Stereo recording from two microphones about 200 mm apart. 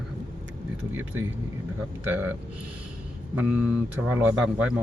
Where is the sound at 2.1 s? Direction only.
10° right (ahead or behind).